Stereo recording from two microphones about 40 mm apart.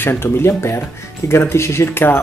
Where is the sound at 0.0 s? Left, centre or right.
Left.